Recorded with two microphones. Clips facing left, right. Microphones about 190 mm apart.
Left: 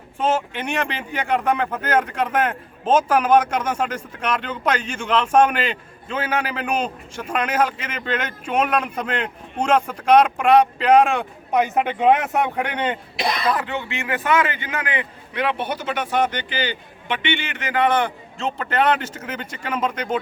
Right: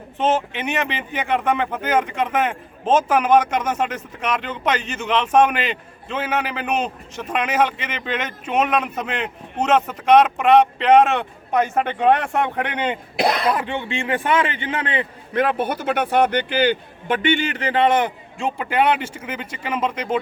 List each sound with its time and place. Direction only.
0.6 s speech: 5° right (ahead or behind)
3.2 s speech: 10° left (ahead or behind)
3.7 s speech: 5° right (ahead or behind); by 7.3 s 10° left (ahead or behind)
7.3 s speech: 5° right (ahead or behind)
10.3 s speech: 10° left (ahead or behind)
13.1 s speech: 65° right (ahead or behind)
13.6 s a man's voice: 25° right (ahead or behind)
15.3 s a man's voice: 45° right (ahead or behind); by 20.1 s 5° right (ahead or behind)